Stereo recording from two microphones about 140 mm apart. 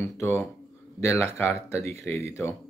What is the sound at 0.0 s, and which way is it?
Speech, 20° left (ahead or behind).